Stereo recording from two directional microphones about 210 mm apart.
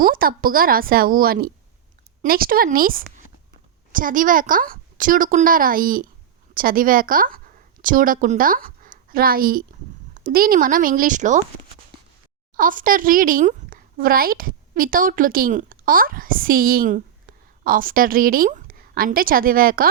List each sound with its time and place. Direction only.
0.0 s a woman's voice: 45° right (ahead or behind)
12.5 s speech: 40° right (ahead or behind)